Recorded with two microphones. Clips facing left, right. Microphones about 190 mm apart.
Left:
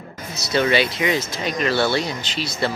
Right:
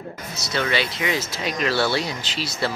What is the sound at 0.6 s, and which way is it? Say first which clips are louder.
Speech: left 5 dB; 20° left (ahead or behind).